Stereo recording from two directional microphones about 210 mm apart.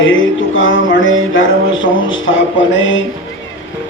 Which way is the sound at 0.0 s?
65° left (ahead or behind).